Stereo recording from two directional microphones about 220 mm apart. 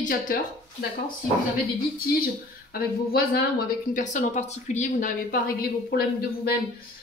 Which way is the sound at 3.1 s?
45° left (ahead or behind).